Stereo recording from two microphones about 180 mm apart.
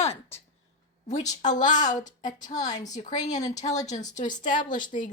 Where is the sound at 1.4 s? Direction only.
45° left (ahead or behind).